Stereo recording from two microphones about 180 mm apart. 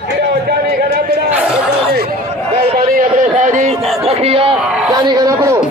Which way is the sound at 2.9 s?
45° right (ahead or behind).